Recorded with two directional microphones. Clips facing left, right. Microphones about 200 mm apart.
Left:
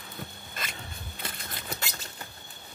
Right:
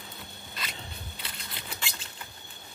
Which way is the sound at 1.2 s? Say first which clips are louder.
Left 7 dB; 45° left (ahead or behind).